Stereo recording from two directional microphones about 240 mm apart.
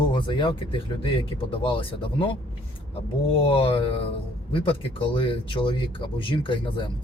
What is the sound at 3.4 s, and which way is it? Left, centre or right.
Speech, left.